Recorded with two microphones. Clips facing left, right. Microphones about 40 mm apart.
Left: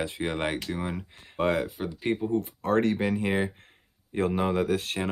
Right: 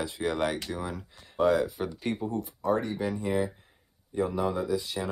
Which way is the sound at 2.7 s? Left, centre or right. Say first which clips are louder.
Left 4 dB; left.